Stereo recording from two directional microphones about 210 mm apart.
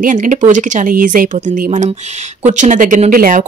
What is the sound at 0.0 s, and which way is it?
Speech, 40° right (ahead or behind).